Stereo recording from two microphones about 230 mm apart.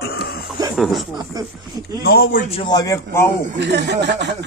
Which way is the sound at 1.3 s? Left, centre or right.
Centre.